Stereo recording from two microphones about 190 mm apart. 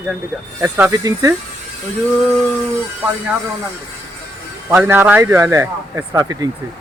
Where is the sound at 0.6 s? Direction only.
15° right (ahead or behind).